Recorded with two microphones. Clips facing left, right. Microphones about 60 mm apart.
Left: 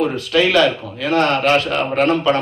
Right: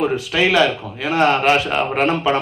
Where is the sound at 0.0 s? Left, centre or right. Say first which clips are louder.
Left 1 dB; centre.